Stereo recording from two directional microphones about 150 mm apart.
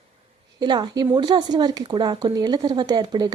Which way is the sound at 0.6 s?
30° right (ahead or behind).